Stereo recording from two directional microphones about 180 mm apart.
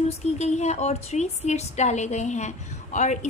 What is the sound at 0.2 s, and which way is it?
A woman's voice, 40° left (ahead or behind).